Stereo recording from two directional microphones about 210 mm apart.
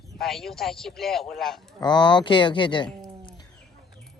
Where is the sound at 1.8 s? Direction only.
20° left (ahead or behind).